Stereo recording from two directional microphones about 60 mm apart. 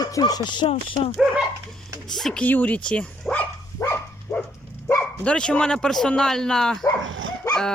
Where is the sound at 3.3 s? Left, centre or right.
Centre.